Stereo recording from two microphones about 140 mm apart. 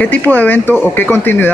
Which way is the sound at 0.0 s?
10° left (ahead or behind).